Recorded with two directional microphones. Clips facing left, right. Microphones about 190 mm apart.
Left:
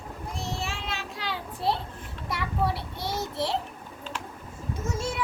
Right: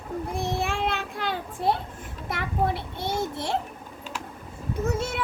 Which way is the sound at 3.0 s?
50° right (ahead or behind).